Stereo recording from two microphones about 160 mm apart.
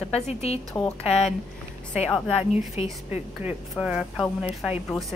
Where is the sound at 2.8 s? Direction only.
40° left (ahead or behind).